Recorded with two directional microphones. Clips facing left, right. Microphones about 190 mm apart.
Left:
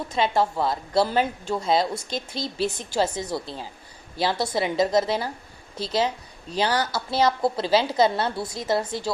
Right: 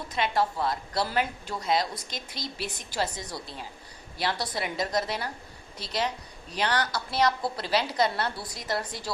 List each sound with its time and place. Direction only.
0.1 s speech: 30° left (ahead or behind)